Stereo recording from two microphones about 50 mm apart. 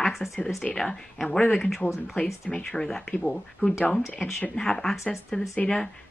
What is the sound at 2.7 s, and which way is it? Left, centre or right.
Speech, centre.